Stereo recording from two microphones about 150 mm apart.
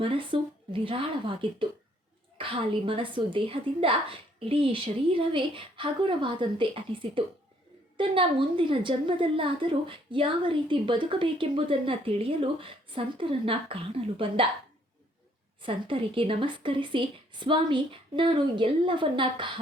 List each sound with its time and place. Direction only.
0.0 s a woman's voice: 35° right (ahead or behind)
15.6 s a woman's voice: 35° right (ahead or behind)